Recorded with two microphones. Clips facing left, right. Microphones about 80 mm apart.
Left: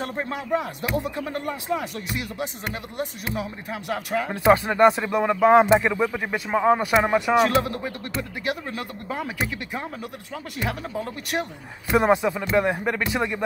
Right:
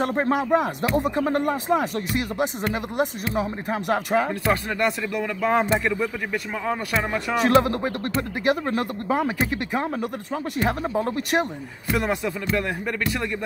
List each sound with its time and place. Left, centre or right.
0.2 s speech: right
4.3 s speech: left
6.8 s speech: centre
7.6 s speech: right
11.9 s speech: left